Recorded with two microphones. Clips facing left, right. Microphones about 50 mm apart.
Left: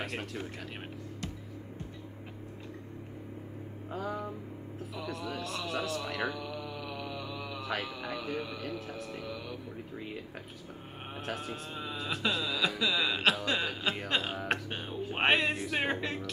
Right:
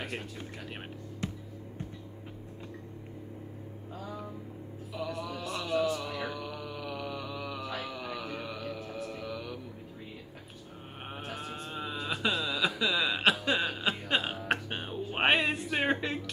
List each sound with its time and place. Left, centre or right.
3.9 s vehicle: left
4.9 s speech: centre
6.2 s mantra: centre
7.8 s speech: centre
11.3 s speech: centre
13.5 s chuckle: centre
14.0 s music: centre
14.7 s music: centre
15.1 s a sound: centre
15.7 s music: centre